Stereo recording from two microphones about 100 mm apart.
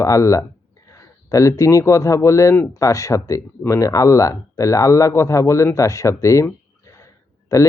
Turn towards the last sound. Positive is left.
turn(degrees=30)  # may be behind; listen again after turning